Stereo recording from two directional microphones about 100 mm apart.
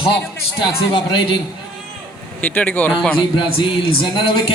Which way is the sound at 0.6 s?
50° left (ahead or behind).